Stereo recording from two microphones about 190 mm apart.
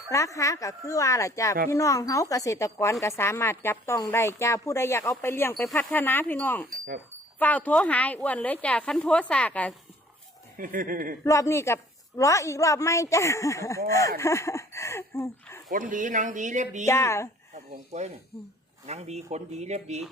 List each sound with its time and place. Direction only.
0.1 s speech: 15° left (ahead or behind)
10.6 s speech: 45° right (ahead or behind)
11.2 s speech: 15° left (ahead or behind)
15.7 s speech: 45° right (ahead or behind)
16.8 s speech: 15° left (ahead or behind)
17.5 s speech: 35° right (ahead or behind)